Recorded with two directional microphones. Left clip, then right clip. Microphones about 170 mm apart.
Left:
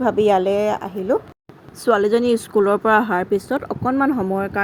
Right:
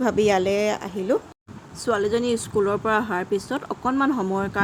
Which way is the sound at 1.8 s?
35° left (ahead or behind).